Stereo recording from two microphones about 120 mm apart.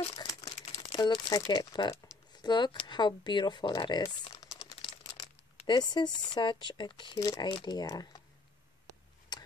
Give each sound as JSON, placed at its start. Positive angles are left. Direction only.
{"t": 0.1, "sound": "crumpling", "side_deg": 30}
{"t": 0.7, "sound": "speech", "side_deg": 40}
{"t": 4.3, "sound": "typing", "side_deg": 30}
{"t": 5.7, "sound": "speech", "side_deg": 40}
{"t": 9.3, "sound": "a sound", "side_deg": 35}